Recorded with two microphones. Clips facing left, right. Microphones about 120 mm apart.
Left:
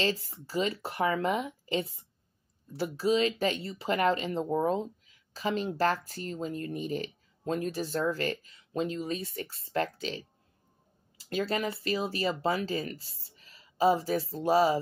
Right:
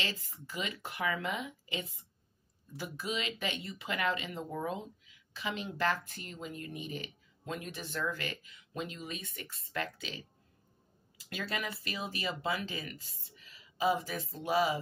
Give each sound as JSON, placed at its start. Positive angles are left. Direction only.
{"t": 0.0, "sound": "speech", "side_deg": 35}